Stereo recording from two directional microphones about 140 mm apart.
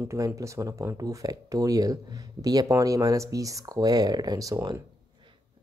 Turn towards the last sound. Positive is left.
turn(degrees=-25)  # may be behind; listen again after turning